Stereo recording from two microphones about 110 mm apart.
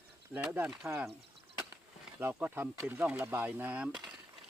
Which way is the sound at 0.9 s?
15° right (ahead or behind).